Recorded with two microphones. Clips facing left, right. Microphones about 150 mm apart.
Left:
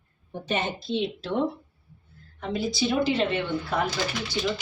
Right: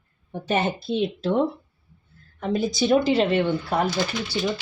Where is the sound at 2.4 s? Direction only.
45° right (ahead or behind).